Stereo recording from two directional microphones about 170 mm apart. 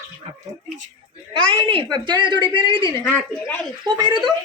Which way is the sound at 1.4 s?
30° right (ahead or behind).